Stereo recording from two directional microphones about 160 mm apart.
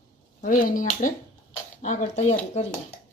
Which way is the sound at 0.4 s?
55° left (ahead or behind).